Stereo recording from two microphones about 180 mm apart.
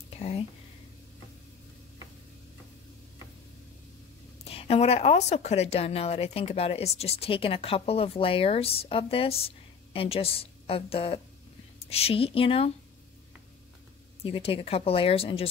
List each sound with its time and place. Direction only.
0.1 s whispering: 35° left (ahead or behind)
4.5 s a woman's voice: 35° left (ahead or behind)
14.2 s a woman's voice: 30° left (ahead or behind)